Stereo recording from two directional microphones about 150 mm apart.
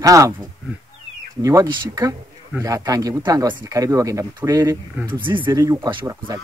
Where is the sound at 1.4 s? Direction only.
25° right (ahead or behind).